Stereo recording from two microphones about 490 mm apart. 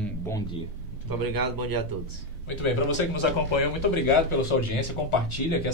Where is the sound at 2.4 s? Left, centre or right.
Left.